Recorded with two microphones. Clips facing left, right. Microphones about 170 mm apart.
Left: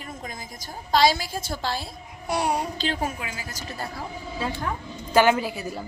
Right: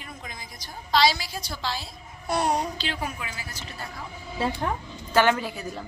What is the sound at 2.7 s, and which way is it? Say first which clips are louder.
A woman's voice: left 4 dB; 45° left (ahead or behind).